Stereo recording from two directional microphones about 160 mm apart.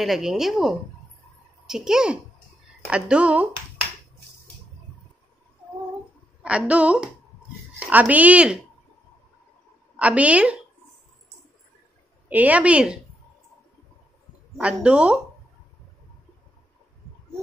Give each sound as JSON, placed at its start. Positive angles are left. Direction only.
{"t": 0.0, "sound": "a woman's voice", "side_deg": 0}
{"t": 6.4, "sound": "a woman's voice", "side_deg": -5}
{"t": 9.9, "sound": "a woman's voice", "side_deg": -10}
{"t": 12.3, "sound": "a woman's voice", "side_deg": -10}
{"t": 14.6, "sound": "a woman's voice", "side_deg": -5}